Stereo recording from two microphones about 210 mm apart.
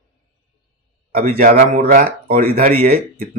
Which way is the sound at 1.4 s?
45° right (ahead or behind).